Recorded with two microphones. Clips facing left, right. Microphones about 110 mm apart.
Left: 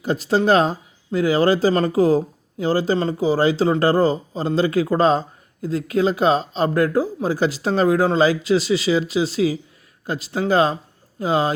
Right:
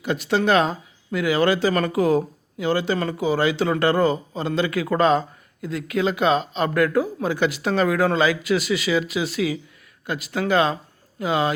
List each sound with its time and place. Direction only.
0.0 s speech: 35° left (ahead or behind)